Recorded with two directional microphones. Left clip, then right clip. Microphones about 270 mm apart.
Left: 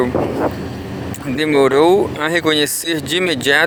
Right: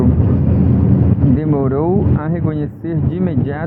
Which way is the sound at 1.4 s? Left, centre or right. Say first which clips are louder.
Left 11 dB; left.